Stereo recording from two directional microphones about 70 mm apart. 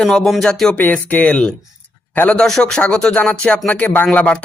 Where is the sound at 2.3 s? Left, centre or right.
Centre.